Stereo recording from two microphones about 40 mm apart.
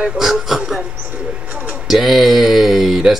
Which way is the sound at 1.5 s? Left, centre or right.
Right.